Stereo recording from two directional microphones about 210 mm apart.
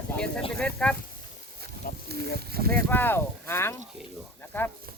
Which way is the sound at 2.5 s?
45° right (ahead or behind).